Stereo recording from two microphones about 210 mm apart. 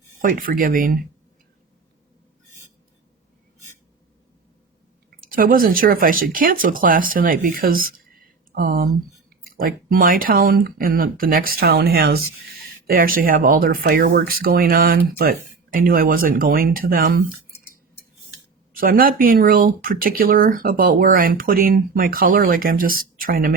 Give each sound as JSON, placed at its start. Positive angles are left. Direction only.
{"t": 0.2, "sound": "speech", "side_deg": -40}
{"t": 5.3, "sound": "speech", "side_deg": -40}
{"t": 18.7, "sound": "speech", "side_deg": -45}